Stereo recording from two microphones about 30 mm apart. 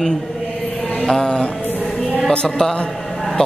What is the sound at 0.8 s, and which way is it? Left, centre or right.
Mantra, left.